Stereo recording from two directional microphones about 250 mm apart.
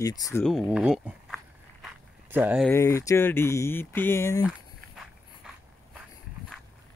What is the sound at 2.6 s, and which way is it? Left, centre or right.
Speech, centre.